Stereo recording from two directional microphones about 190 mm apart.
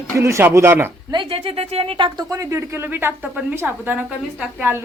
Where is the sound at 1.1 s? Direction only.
25° right (ahead or behind); by 4.8 s 5° right (ahead or behind).